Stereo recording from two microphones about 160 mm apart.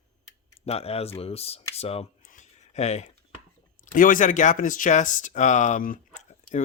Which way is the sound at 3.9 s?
55° left (ahead or behind).